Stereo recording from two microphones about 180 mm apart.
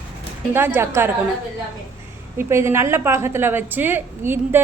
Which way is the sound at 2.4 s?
15° right (ahead or behind).